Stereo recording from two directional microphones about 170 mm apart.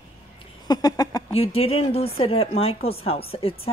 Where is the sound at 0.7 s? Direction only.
20° left (ahead or behind).